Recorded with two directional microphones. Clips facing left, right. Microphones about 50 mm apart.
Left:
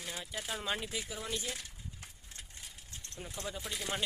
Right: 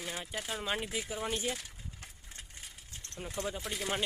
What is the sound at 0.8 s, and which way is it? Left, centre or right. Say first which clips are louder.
Speech: right 4 dB; right.